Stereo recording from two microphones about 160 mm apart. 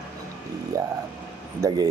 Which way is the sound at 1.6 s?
25° right (ahead or behind).